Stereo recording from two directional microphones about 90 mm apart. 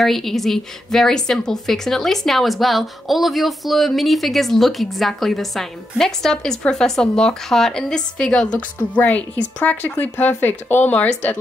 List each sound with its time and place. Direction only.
0.0 s a woman's voice: centre (ahead or behind); by 11.3 s 15° left (ahead or behind)